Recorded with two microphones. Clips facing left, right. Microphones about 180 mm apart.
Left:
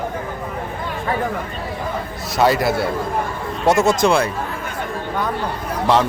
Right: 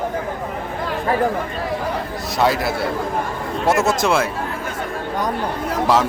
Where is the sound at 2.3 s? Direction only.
Centre (ahead or behind).